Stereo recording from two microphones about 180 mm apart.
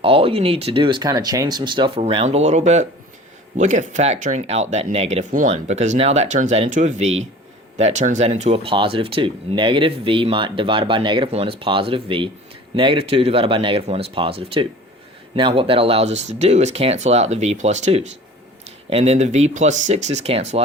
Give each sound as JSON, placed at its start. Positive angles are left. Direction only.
{"t": 0.0, "sound": "speech", "side_deg": -30}